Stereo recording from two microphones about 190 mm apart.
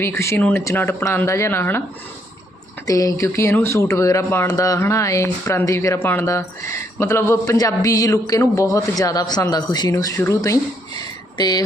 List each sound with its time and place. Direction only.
0.0 s speech: 15° left (ahead or behind)
2.8 s speech: 20° left (ahead or behind)